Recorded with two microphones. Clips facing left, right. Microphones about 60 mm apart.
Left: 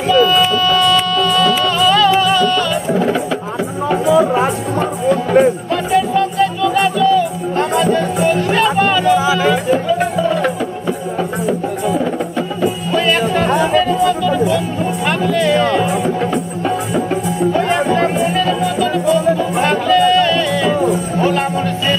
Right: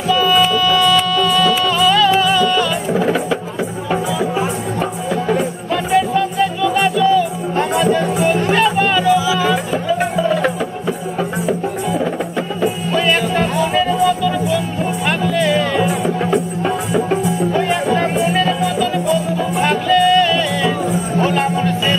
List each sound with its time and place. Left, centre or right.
0.1 s music: centre
5.7 s music: centre
9.0 s music: left
9.5 s music: centre